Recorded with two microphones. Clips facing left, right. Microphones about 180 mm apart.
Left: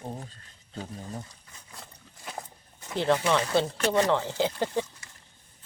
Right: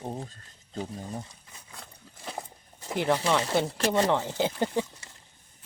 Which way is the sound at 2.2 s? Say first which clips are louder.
Right 1 dB; 30° right (ahead or behind).